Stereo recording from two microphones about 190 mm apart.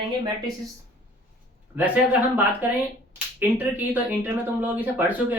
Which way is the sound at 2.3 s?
10° right (ahead or behind).